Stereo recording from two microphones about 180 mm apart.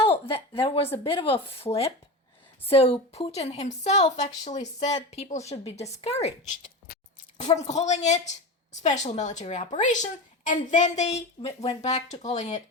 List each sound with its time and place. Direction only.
0.0 s speech: 30° left (ahead or behind)
6.8 s a sound: 55° left (ahead or behind)
7.5 s speech: 40° left (ahead or behind)